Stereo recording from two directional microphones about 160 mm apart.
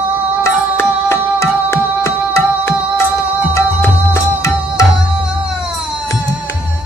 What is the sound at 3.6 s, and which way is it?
Music, 15° left (ahead or behind).